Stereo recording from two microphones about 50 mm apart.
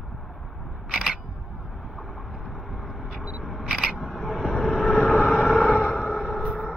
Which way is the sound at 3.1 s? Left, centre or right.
Centre.